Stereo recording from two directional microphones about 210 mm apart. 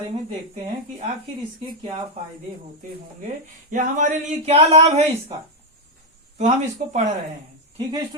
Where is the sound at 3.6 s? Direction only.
40° right (ahead or behind).